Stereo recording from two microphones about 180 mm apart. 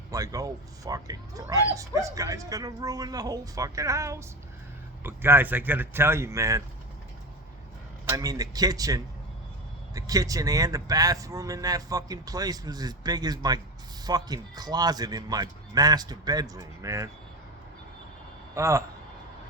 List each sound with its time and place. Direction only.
0.1 s speech: 20° right (ahead or behind)
8.0 s speech: 20° right (ahead or behind)
18.5 s speech: 15° right (ahead or behind)